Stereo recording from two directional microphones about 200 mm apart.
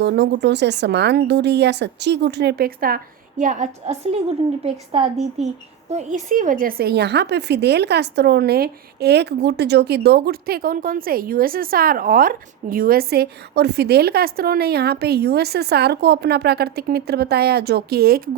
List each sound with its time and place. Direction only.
0.0 s a woman's voice: 60° right (ahead or behind)